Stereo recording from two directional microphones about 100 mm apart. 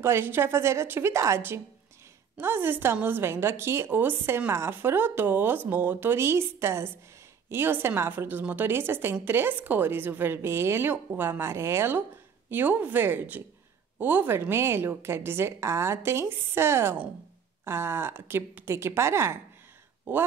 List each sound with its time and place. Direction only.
0.0 s a woman's voice: 25° right (ahead or behind)